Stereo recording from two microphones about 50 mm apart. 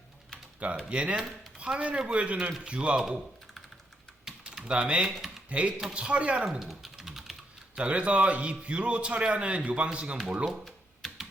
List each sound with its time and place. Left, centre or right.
0.9 s a man's voice: right
3.0 s typing: centre
4.7 s a man's voice: right
5.0 s speech: centre
5.5 s a man's voice: right
6.6 s typing: centre
7.8 s a man's voice: right
10.5 s computer keyboard: centre